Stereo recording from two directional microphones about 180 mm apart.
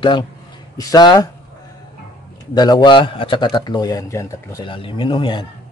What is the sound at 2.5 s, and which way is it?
Speech, 20° left (ahead or behind).